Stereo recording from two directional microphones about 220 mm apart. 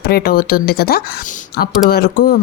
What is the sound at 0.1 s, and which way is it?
Speech, 45° left (ahead or behind).